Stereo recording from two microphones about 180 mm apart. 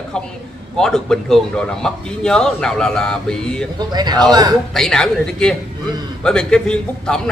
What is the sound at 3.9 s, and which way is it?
Speech, 20° right (ahead or behind).